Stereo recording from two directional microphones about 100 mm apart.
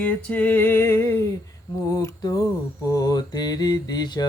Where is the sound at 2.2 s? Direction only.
40° left (ahead or behind).